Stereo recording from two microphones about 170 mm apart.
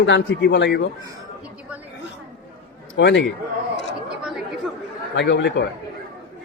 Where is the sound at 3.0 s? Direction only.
90° left.